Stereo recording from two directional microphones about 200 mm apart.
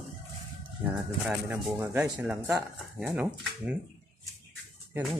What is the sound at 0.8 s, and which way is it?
Speech, 5° right (ahead or behind).